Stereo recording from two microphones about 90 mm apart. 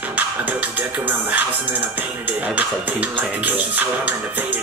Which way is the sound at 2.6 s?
20° right (ahead or behind).